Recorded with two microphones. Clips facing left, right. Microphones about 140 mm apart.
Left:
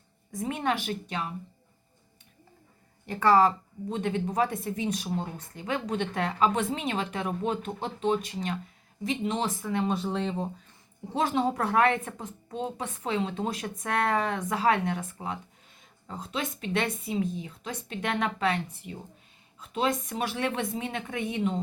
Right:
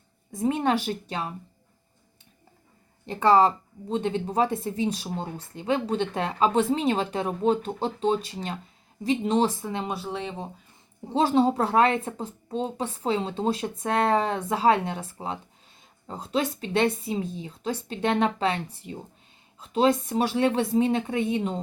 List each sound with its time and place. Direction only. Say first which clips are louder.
0.3 s a woman's voice: right 5 dB; 30° right (ahead or behind)
3.1 s a woman's voice: right 2 dB; 25° right (ahead or behind)
9.8 s speech: left 3 dB; 5° right (ahead or behind)
11.1 s a woman's voice: right 5 dB; 30° right (ahead or behind)